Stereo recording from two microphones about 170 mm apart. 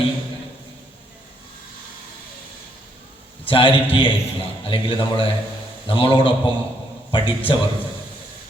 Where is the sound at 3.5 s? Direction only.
30° left (ahead or behind).